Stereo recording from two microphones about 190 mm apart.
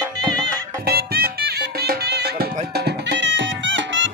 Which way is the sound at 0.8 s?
55° right (ahead or behind).